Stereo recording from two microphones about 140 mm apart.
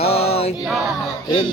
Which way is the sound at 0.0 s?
45° left (ahead or behind).